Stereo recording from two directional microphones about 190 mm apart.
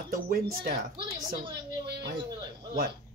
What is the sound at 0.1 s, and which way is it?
Speech, 50° right (ahead or behind).